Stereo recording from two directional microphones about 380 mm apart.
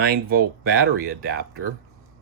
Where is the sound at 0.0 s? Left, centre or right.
Right.